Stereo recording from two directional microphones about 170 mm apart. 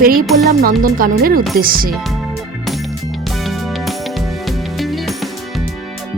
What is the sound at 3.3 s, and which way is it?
Music, centre (ahead or behind).